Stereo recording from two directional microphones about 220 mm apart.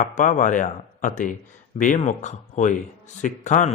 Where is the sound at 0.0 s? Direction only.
35° left (ahead or behind).